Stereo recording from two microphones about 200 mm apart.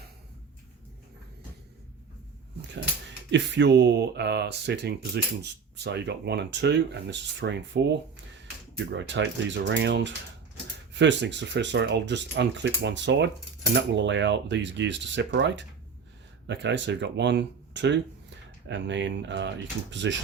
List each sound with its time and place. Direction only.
3.3 s speech: 60° right (ahead or behind)